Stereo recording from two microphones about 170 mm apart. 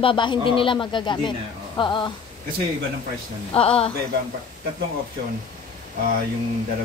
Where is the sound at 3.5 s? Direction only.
35° left (ahead or behind).